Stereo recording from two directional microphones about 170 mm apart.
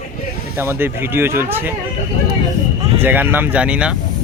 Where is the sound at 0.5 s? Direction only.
15° right (ahead or behind).